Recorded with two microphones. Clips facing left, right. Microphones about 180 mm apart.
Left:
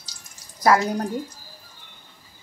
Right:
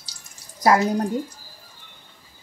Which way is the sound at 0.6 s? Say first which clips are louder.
Right 1 dB; 25° right (ahead or behind).